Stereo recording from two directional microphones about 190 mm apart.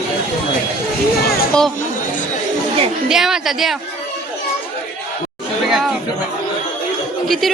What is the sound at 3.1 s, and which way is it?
Speech, centre (ahead or behind).